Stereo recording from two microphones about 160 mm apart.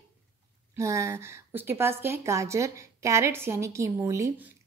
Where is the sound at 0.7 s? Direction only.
20° right (ahead or behind).